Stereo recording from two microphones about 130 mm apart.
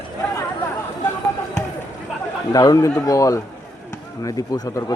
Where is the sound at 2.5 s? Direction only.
30° left (ahead or behind).